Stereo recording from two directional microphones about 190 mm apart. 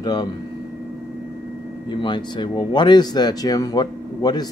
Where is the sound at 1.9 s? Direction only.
25° left (ahead or behind).